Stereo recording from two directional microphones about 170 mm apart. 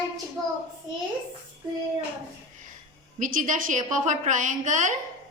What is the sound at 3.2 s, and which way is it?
A woman's voice, 50° right (ahead or behind).